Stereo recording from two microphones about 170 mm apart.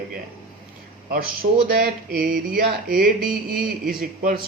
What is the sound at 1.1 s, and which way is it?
Speech, 60° right (ahead or behind).